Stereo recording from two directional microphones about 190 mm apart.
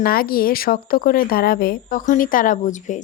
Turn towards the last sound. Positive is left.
turn(degrees=40)  # may be behind; listen again after turning